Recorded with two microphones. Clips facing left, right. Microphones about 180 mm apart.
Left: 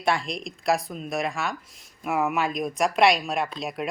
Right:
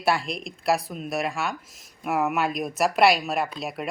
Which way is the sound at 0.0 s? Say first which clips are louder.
Right 1 dB; 5° right (ahead or behind).